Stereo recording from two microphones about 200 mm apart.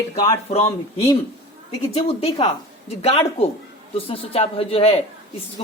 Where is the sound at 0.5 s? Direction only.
30° left (ahead or behind).